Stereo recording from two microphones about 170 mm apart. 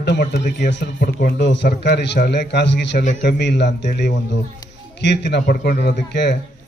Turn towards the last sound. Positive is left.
turn(degrees=90)